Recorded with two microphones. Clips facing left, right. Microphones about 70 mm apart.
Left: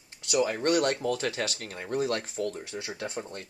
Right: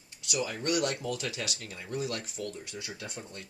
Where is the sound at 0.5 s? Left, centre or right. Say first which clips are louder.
Left 5 dB; left.